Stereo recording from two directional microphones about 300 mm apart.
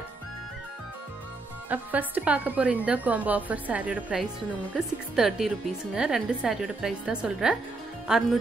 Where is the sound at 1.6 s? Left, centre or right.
Centre.